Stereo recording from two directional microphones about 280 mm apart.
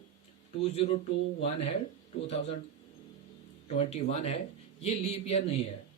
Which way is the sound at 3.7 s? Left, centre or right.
Left.